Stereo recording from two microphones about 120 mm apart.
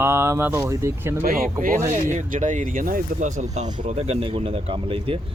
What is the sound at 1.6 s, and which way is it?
Speech, 90° right.